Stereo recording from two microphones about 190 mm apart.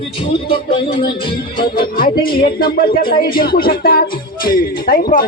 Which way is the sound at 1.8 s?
50° left (ahead or behind).